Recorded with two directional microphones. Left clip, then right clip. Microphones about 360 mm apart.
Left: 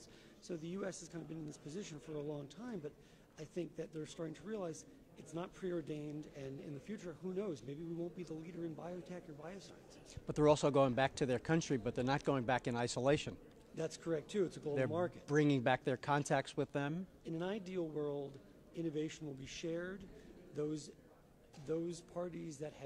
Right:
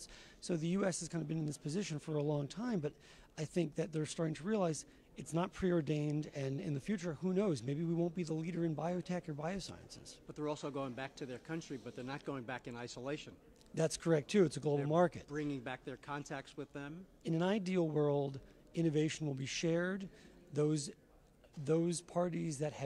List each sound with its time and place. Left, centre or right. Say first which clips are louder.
0.4 s a man's voice: right 7 dB; right
10.2 s speech: left 10 dB; centre
13.7 s a man's voice: right 6 dB; right
15.2 s speech: left 8 dB; left
17.2 s speech: right 7 dB; right